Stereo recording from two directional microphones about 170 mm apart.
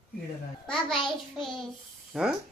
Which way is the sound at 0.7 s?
Centre (ahead or behind).